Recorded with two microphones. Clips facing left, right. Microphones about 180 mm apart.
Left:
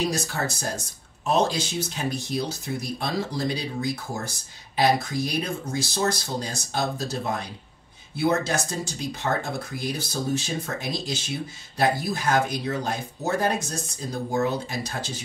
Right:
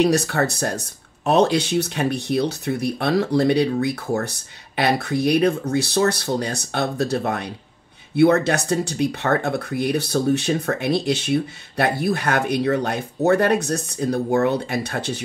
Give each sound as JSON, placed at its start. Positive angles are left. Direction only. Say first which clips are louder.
{"t": 0.0, "sound": "speech", "louder": "right 9 dB", "side_deg": -65}